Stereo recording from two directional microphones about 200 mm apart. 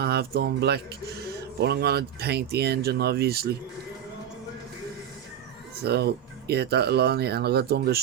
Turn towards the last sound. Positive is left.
turn(degrees=-55)  # may be behind; listen again after turning